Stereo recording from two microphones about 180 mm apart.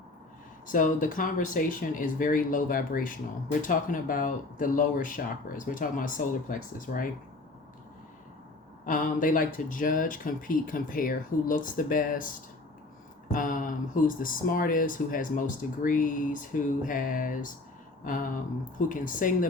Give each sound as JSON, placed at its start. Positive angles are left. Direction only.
{"t": 0.7, "sound": "speech", "side_deg": 45}
{"t": 8.9, "sound": "speech", "side_deg": 45}
{"t": 13.3, "sound": "speech", "side_deg": 50}
{"t": 18.0, "sound": "a sound", "side_deg": 50}
{"t": 18.8, "sound": "speech", "side_deg": 45}